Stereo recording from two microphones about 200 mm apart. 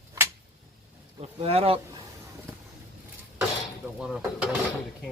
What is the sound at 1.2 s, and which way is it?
Speech, 30° right (ahead or behind).